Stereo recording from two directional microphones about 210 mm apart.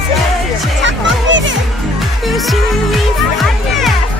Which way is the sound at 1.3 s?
60° right (ahead or behind).